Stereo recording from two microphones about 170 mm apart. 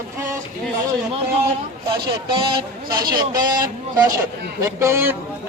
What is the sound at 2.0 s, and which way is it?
Speech, 25° right (ahead or behind).